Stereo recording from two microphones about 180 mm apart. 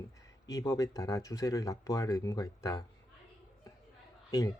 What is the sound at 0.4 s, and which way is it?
Speech, 20° left (ahead or behind).